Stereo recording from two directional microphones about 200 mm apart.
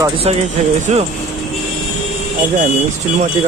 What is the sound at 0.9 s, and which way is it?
Speech, 35° right (ahead or behind).